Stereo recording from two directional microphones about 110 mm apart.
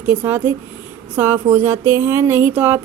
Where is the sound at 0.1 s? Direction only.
20° right (ahead or behind).